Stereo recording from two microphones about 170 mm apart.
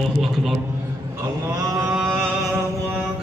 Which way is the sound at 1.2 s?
20° right (ahead or behind).